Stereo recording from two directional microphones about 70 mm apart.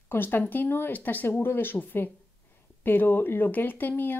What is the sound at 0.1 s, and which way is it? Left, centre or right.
Speech, left.